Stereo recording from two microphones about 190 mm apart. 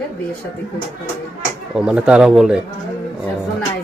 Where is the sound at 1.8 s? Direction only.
5° right (ahead or behind).